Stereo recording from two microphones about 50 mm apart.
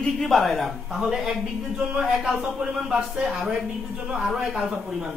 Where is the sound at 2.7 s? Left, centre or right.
Centre.